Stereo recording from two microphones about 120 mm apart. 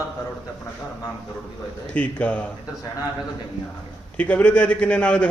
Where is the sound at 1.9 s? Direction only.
10° left (ahead or behind).